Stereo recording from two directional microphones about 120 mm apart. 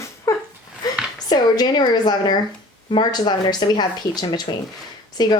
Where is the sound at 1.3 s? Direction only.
35° left (ahead or behind).